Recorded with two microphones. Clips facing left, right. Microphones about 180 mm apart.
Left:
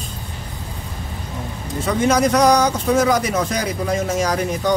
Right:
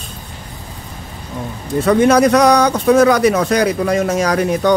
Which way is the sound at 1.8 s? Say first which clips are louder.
Right 6 dB; 65° right (ahead or behind).